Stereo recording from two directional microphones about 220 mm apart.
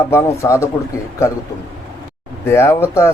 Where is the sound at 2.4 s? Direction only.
10° left (ahead or behind).